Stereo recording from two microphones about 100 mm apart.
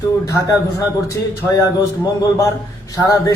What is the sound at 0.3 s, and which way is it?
Speech, 35° left (ahead or behind).